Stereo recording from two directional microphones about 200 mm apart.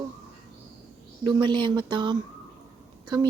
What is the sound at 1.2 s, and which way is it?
A woman's voice, 25° right (ahead or behind).